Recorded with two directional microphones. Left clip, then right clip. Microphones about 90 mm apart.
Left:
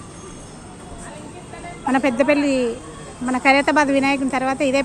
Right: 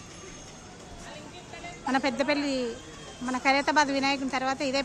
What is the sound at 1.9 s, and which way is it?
A woman's voice, 5° left (ahead or behind).